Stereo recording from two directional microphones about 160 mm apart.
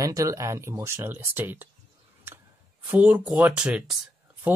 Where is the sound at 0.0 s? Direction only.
20° right (ahead or behind).